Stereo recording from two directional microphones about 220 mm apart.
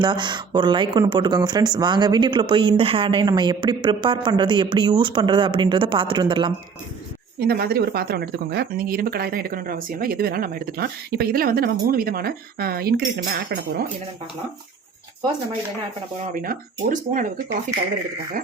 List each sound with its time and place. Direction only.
0.0 s speech: 20° right (ahead or behind)
7.3 s speech: 45° right (ahead or behind)
16.3 s speech: 40° right (ahead or behind)